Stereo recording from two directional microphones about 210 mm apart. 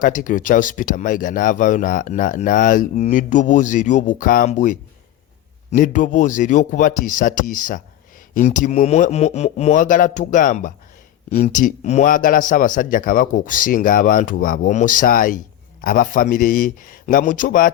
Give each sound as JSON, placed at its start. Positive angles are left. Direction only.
{"t": 0.0, "sound": "speech", "side_deg": 40}